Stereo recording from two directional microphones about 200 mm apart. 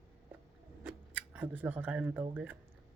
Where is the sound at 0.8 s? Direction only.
10° right (ahead or behind).